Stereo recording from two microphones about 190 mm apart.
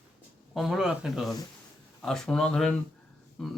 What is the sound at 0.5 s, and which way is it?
Speech, centre (ahead or behind).